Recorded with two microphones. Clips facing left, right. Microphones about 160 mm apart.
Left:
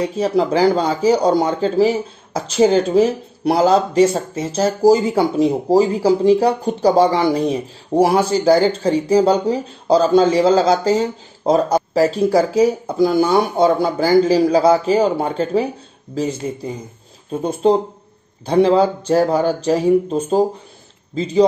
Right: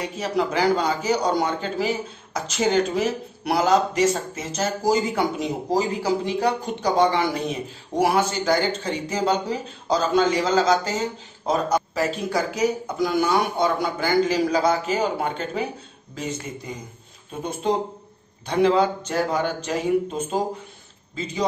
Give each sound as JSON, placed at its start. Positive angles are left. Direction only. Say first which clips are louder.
{"t": 0.0, "sound": "a man's voice", "louder": "left 7 dB", "side_deg": 30}